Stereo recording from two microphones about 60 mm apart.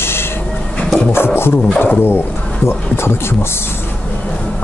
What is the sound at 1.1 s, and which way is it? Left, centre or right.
Speech, left.